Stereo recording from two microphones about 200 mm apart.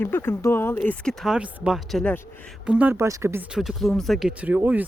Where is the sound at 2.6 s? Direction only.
5° right (ahead or behind).